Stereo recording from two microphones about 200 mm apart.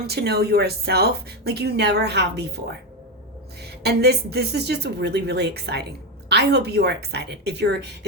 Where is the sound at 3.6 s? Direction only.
55° right (ahead or behind).